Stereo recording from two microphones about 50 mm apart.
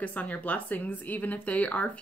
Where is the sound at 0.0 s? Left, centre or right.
Left.